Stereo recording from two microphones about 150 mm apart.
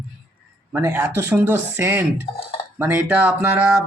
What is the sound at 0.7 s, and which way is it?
Speech, 15° right (ahead or behind).